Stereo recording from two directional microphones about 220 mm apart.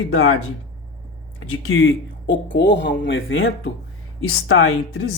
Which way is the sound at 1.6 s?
60° left (ahead or behind).